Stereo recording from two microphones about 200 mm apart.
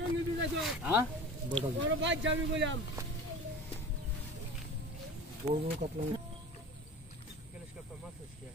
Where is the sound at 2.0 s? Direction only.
65° right (ahead or behind).